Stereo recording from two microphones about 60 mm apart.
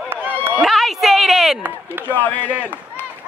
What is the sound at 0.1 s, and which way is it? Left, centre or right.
Run, right.